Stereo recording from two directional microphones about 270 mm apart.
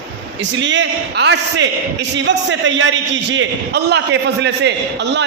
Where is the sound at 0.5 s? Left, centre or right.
Right.